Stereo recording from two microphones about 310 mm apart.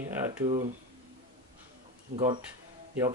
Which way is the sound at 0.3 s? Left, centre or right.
Centre.